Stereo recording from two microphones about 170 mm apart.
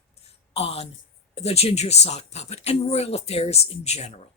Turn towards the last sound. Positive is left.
turn(degrees=40)  # may be behind; listen again after turning